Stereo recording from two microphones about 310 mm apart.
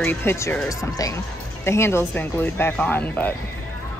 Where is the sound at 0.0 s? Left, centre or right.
Centre.